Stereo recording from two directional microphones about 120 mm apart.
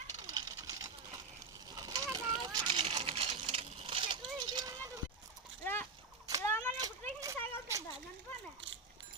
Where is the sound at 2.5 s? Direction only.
40° right (ahead or behind).